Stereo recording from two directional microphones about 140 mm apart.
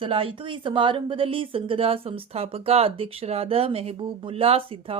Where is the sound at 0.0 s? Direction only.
40° right (ahead or behind).